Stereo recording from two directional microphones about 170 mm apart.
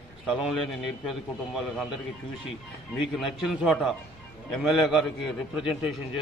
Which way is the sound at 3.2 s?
Centre (ahead or behind).